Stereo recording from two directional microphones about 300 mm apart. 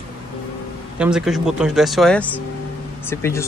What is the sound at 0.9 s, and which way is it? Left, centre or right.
Speech, centre.